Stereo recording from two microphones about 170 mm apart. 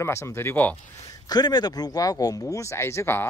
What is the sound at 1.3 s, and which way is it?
Speech, 25° left (ahead or behind).